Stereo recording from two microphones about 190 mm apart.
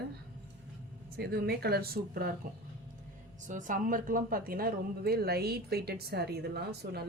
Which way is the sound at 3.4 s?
40° right (ahead or behind).